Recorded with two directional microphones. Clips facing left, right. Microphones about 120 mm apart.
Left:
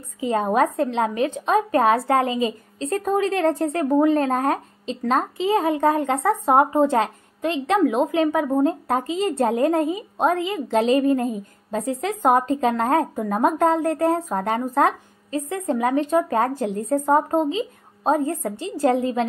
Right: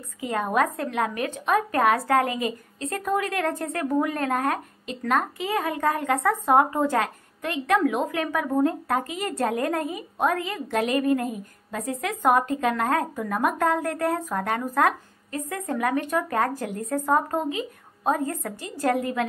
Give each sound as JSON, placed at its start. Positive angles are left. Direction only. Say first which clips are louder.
{"t": 0.2, "sound": "a woman's voice", "louder": "left 4 dB", "side_deg": 30}